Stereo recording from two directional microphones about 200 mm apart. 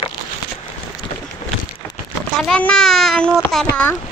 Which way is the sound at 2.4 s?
5° left (ahead or behind).